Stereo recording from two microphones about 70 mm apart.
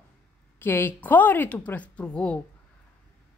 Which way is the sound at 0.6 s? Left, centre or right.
Left.